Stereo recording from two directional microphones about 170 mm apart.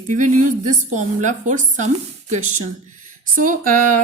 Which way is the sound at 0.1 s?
45° right (ahead or behind).